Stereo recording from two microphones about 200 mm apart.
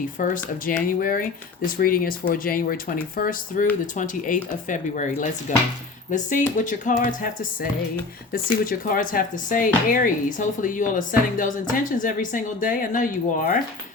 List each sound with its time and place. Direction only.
0.2 s speech: 45° left (ahead or behind)